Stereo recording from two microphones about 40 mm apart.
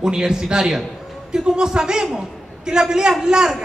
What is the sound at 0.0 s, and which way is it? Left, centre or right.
A man's voice, centre.